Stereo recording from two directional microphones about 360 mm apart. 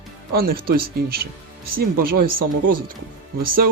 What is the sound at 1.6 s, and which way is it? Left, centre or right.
Speech, right.